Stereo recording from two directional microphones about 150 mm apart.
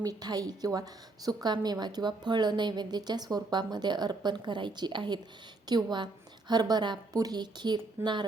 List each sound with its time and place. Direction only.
0.0 s a woman's voice: 25° right (ahead or behind)